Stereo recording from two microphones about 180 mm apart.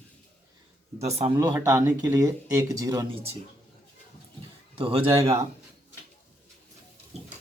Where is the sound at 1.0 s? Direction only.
35° right (ahead or behind).